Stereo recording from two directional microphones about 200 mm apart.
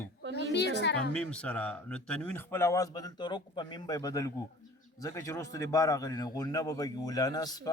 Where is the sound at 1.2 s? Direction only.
5° left (ahead or behind).